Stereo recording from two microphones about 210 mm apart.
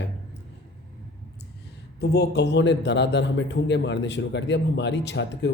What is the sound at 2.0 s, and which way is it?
Speech, 50° left (ahead or behind).